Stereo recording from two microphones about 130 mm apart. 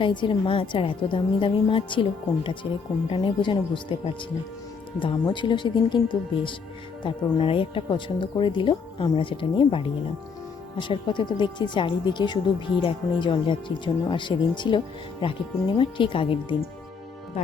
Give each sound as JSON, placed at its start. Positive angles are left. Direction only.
{"t": 0.0, "sound": "a woman's voice", "side_deg": 40}
{"t": 15.8, "sound": "a woman's voice", "side_deg": 40}